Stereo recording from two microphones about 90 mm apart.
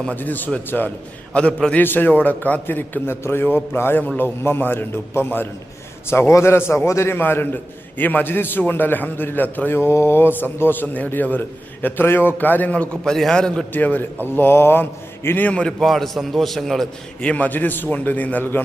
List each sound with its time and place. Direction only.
0.0 s a man's voice: 15° left (ahead or behind)
13.7 s a man's voice: 20° left (ahead or behind)
15.8 s a man's voice: centre (ahead or behind); by 18.6 s 20° left (ahead or behind)